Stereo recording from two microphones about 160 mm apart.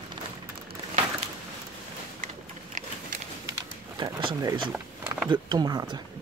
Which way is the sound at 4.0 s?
30° right (ahead or behind).